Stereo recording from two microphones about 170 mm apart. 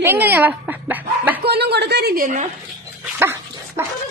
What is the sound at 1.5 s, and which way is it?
A woman's voice, 70° right (ahead or behind).